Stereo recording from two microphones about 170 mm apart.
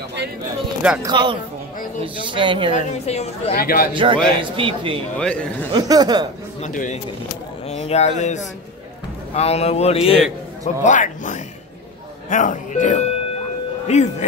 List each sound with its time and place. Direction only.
1.0 s speech: 30° right (ahead or behind)
3.1 s a man's voice: 40° left (ahead or behind)
3.5 s speech: 60° left (ahead or behind)
3.9 s speech: 30° right (ahead or behind)
5.2 s a man's voice: 5° left (ahead or behind)
5.7 s speech: 25° right (ahead or behind)
6.6 s a man's voice: 45° left (ahead or behind)